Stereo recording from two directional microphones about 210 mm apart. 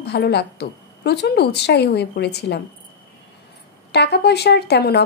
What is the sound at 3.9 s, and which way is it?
A woman's voice, 50° left (ahead or behind).